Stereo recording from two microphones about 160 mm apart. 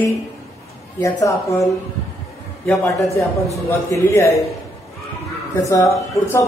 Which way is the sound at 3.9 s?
15° left (ahead or behind).